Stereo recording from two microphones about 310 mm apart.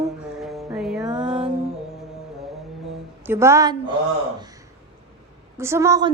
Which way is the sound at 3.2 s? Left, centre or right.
Centre.